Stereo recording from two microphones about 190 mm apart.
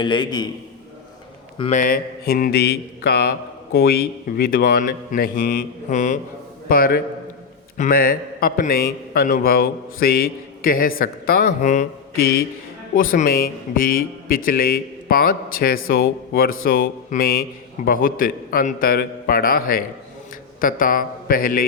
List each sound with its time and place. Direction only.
0.0 s a man's voice: 25° left (ahead or behind)
1.7 s a man's voice: 45° left (ahead or behind)